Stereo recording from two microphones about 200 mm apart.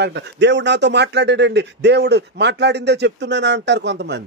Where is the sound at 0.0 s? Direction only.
60° right (ahead or behind).